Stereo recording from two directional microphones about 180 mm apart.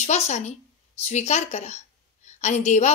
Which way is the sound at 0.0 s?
40° left (ahead or behind).